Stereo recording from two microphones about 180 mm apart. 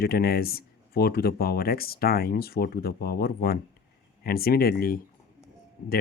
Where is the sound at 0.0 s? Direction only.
60° left (ahead or behind).